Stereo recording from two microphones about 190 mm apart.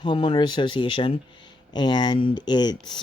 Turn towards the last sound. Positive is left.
turn(degrees=20)  # may be behind; listen again after turning